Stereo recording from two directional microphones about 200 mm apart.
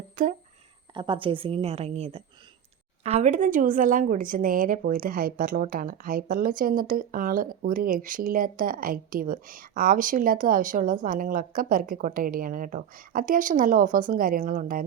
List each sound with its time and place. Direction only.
0.2 s speech: 40° right (ahead or behind)
0.9 s a woman's voice: 25° right (ahead or behind); by 14.8 s 45° right (ahead or behind)